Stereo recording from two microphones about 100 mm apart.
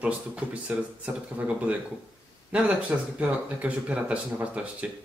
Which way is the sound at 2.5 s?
15° right (ahead or behind).